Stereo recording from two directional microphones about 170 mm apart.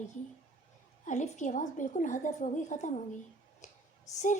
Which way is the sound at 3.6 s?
45° left (ahead or behind).